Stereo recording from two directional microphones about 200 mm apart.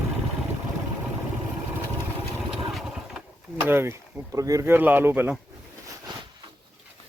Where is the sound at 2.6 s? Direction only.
Centre (ahead or behind).